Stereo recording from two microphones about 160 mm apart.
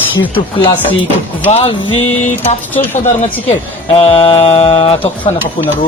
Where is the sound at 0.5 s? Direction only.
35° left (ahead or behind).